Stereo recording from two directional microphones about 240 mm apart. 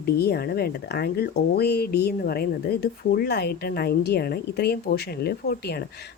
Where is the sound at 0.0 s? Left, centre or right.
Left.